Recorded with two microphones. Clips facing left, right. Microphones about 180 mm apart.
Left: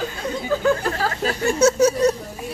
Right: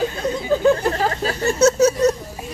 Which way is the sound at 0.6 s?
25° right (ahead or behind).